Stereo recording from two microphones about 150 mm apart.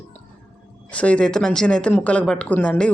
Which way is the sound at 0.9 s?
10° left (ahead or behind).